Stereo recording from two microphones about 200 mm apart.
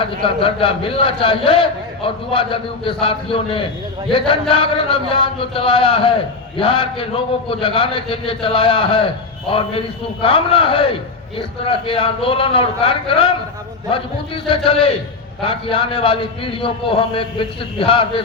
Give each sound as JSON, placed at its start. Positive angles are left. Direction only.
{"t": 0.0, "sound": "a man's voice", "side_deg": 25}